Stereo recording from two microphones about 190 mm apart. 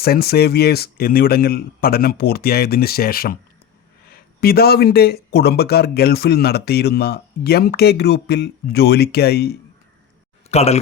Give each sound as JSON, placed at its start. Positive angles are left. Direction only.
{"t": 0.0, "sound": "speech", "side_deg": 55}
{"t": 10.5, "sound": "speech", "side_deg": 35}